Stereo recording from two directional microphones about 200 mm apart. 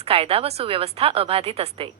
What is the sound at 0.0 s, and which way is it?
A woman's voice, 30° right (ahead or behind).